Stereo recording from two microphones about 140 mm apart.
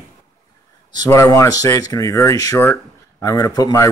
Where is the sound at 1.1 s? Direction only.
20° left (ahead or behind).